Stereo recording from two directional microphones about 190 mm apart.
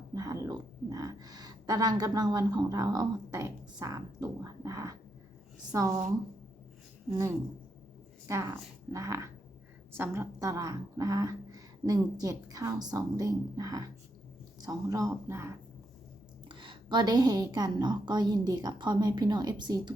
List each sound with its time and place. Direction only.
0.1 s speech: 20° right (ahead or behind)
7.1 s speech: 15° right (ahead or behind)
16.5 s speech: 25° right (ahead or behind)